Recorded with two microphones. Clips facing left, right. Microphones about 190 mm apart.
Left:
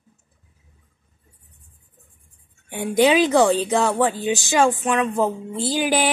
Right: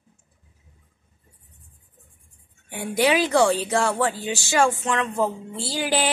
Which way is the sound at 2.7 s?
20° left (ahead or behind).